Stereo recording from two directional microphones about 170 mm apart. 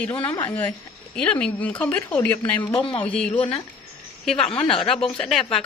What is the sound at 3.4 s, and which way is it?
A woman's voice, 35° left (ahead or behind).